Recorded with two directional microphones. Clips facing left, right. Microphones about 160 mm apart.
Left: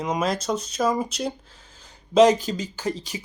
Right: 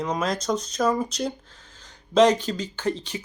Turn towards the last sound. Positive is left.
turn(degrees=10)  # may be behind; listen again after turning